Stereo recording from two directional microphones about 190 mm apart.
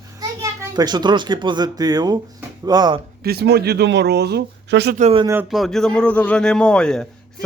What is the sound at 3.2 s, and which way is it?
Speech, 60° right (ahead or behind).